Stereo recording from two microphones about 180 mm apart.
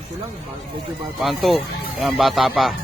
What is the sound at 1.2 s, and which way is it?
Speech, centre (ahead or behind).